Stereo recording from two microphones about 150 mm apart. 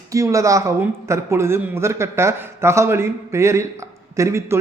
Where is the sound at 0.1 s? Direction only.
20° right (ahead or behind).